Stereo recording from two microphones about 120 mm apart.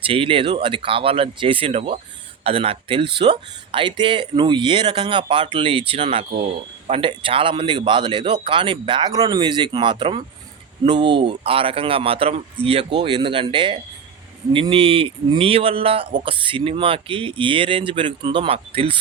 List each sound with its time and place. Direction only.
0.0 s speech: 50° right (ahead or behind)